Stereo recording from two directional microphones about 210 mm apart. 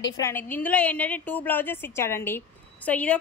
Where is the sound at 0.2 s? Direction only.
10° left (ahead or behind).